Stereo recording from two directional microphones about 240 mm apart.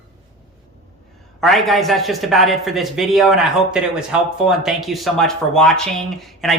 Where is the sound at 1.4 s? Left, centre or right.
Centre.